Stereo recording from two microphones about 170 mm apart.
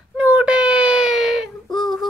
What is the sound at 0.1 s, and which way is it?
Whimper, 5° right (ahead or behind).